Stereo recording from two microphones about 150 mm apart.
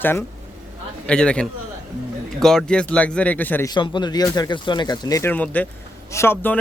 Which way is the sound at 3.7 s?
30° left (ahead or behind).